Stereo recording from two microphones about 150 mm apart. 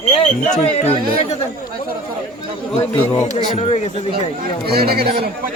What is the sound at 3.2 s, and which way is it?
Speech, 25° right (ahead or behind).